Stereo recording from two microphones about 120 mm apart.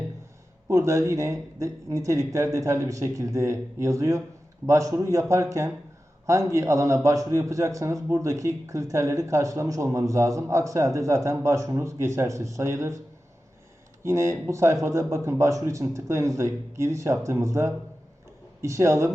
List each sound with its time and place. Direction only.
0.7 s a man's voice: 25° right (ahead or behind)
14.0 s a man's voice: 25° right (ahead or behind)